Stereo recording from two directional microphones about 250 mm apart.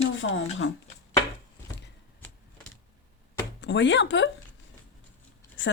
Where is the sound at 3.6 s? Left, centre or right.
Left.